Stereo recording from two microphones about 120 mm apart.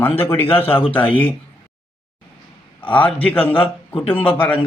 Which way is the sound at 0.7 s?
50° left (ahead or behind).